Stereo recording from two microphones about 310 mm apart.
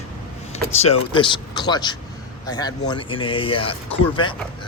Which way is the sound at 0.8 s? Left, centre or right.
Centre.